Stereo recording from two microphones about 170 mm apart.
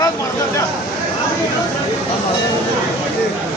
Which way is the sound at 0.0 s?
20° left (ahead or behind).